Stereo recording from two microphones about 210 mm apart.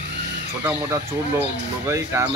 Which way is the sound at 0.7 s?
10° right (ahead or behind).